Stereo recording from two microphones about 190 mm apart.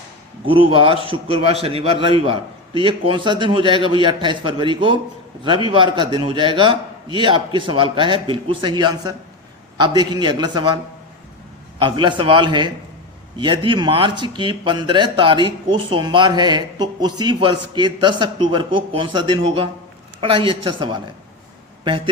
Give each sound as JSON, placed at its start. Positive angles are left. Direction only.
{"t": 0.7, "sound": "speech", "side_deg": -25}
{"t": 11.8, "sound": "speech", "side_deg": -25}